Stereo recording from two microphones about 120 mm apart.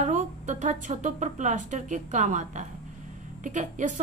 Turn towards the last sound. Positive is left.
turn(degrees=-90)